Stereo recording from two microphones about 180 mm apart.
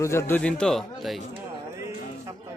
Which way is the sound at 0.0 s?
15° left (ahead or behind).